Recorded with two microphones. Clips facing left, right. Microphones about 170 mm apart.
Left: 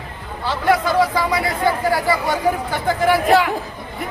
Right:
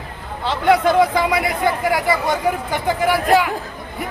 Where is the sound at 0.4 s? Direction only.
20° right (ahead or behind).